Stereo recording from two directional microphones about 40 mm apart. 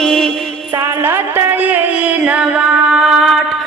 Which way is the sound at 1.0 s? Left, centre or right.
Right.